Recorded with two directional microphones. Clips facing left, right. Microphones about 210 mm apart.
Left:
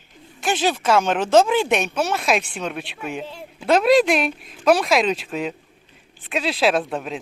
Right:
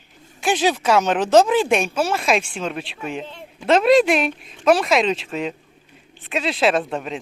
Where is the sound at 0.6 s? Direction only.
5° right (ahead or behind).